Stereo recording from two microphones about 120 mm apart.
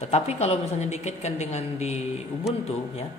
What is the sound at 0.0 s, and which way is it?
A woman's voice, 65° left (ahead or behind).